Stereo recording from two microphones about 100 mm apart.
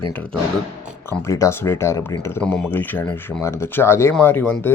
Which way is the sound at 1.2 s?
30° left (ahead or behind).